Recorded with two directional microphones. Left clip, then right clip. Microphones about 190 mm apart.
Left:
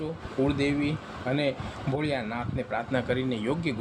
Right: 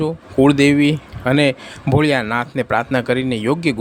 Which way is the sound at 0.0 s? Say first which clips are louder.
Right 14 dB; 50° right (ahead or behind).